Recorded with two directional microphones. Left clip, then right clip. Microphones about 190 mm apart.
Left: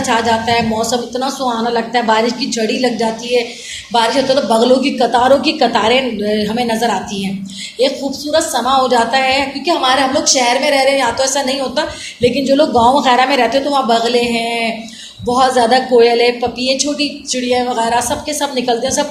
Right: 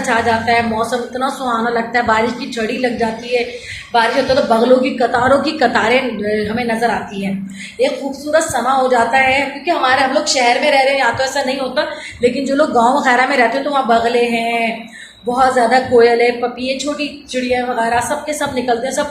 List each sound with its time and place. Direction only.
0.1 s a woman's voice: 35° left (ahead or behind)
8.3 s a woman's voice: 30° left (ahead or behind)
12.5 s a woman's voice: 20° left (ahead or behind)